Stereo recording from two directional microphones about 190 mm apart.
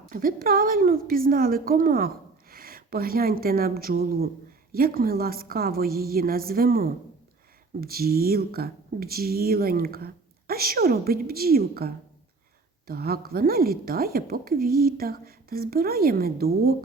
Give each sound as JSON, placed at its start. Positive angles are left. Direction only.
{"t": 0.1, "sound": "a woman's voice", "side_deg": -50}